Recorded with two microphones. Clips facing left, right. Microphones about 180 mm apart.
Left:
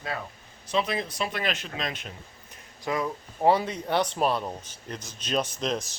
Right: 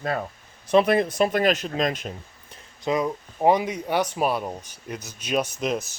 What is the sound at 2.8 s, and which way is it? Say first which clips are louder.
Speech: right 5 dB; 20° right (ahead or behind).